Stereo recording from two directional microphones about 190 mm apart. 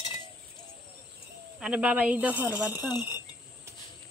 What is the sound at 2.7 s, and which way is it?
Speech, 20° left (ahead or behind).